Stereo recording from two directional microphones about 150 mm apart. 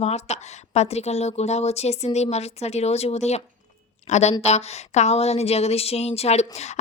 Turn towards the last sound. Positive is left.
turn(degrees=45)  # may be behind; listen again after turning